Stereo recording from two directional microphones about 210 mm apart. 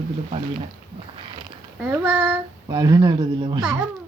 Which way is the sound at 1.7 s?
10° right (ahead or behind).